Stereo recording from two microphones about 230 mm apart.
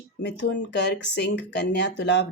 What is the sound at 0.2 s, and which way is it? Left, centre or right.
Speech, left.